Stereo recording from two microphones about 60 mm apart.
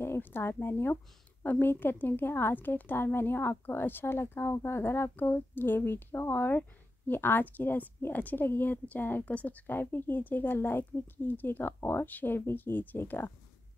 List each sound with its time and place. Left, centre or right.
0.0 s speech: left
1.4 s a woman's voice: left